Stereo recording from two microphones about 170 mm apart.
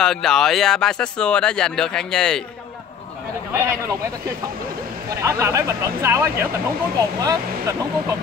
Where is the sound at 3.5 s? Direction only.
15° right (ahead or behind).